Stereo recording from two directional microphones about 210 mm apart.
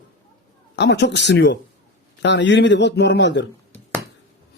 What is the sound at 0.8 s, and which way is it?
A man's voice, 55° left (ahead or behind).